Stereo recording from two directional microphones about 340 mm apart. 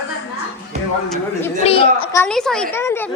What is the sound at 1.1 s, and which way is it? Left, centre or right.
A woman's voice, centre.